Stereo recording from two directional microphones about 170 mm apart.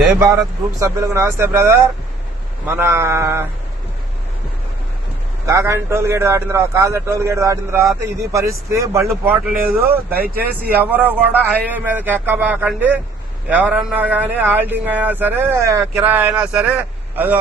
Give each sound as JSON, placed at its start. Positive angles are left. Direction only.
{"t": 0.8, "sound": "a man's voice", "side_deg": -15}
{"t": 5.5, "sound": "a man's voice", "side_deg": -15}